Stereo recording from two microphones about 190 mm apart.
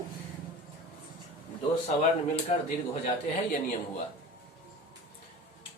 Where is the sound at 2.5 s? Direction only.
35° left (ahead or behind).